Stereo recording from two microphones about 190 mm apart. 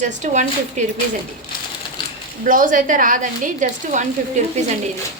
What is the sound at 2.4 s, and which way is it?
A woman's voice, 45° right (ahead or behind).